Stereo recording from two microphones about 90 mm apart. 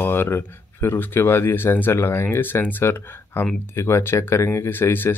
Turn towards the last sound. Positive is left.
turn(degrees=25)  # may be behind; listen again after turning